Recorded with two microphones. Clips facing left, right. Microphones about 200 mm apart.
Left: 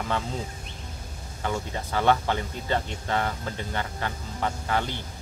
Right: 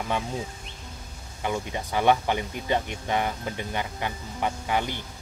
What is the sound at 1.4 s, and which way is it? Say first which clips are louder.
Speech: right 1 dB; 15° right (ahead or behind).